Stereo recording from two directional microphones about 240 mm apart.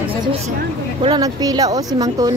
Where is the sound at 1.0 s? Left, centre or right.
Centre.